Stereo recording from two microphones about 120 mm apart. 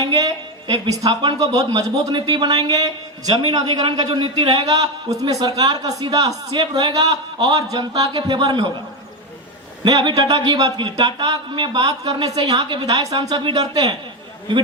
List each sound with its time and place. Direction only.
0.0 s a woman's voice: 35° right (ahead or behind)
4.0 s speech: 45° right (ahead or behind)
4.7 s a man's voice: 30° right (ahead or behind)
9.8 s a man's voice: 40° right (ahead or behind)